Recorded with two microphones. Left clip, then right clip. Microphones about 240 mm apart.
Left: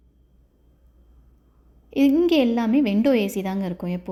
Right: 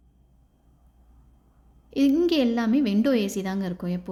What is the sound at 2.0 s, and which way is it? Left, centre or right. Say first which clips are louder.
A woman's voice: left 3 dB; centre.